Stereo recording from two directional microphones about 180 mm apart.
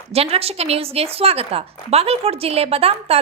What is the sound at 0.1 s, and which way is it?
A woman's voice, 35° right (ahead or behind).